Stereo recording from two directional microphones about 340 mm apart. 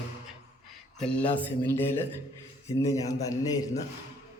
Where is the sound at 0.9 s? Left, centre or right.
Centre.